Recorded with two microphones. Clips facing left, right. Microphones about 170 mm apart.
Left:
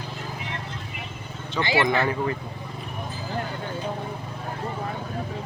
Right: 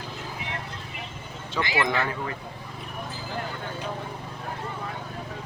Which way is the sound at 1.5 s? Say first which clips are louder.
Left 4 dB; 30° left (ahead or behind).